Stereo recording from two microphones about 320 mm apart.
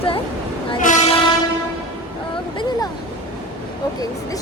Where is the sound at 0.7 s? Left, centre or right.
Left.